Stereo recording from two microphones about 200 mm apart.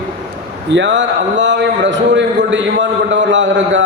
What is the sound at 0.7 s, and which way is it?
A man's voice, 65° right (ahead or behind).